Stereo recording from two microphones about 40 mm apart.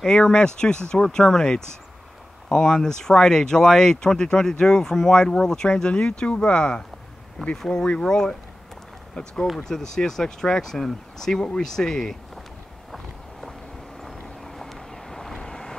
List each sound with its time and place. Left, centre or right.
0.0 s speech: centre
12.9 s a sound: centre
14.0 s vehicle: centre